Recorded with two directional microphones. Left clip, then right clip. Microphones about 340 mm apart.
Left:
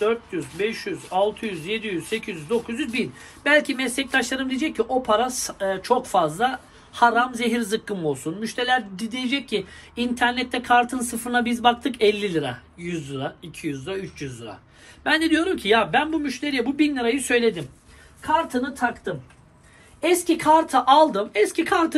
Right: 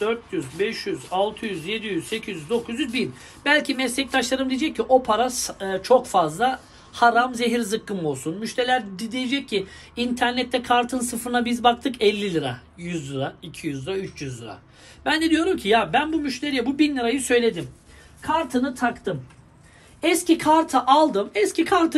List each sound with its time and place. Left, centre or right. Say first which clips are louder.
0.0 s speech: left 2 dB; centre
20.3 s speech: left 1 dB; centre